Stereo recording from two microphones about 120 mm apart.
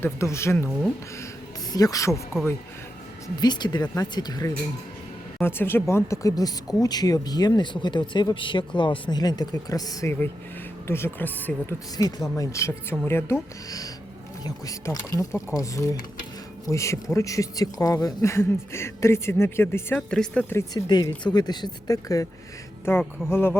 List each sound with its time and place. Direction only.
0.0 s speech: 25° left (ahead or behind)
1.7 s speech: 30° left (ahead or behind)
3.3 s speech: 35° left (ahead or behind)
5.4 s speech: 20° left (ahead or behind)
10.8 s speech: 20° left (ahead or behind)
11.9 s speech: 30° left (ahead or behind); by 20.4 s 10° left (ahead or behind)
20.7 s speech: 35° left (ahead or behind); by 23.6 s 20° left (ahead or behind)